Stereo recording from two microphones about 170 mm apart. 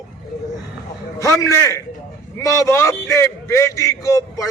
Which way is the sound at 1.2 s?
20° left (ahead or behind).